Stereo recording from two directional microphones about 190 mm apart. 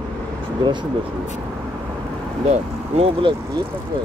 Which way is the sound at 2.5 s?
30° right (ahead or behind).